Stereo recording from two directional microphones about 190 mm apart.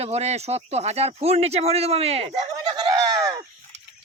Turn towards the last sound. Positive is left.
turn(degrees=-20)  # may be behind; listen again after turning